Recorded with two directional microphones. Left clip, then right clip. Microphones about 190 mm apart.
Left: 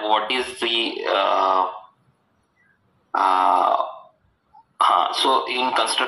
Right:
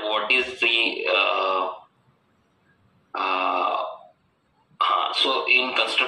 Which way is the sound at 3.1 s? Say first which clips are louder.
Left 6 dB; 25° left (ahead or behind).